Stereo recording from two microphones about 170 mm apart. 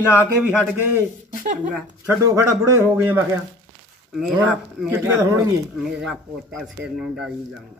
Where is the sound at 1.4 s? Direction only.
45° right (ahead or behind).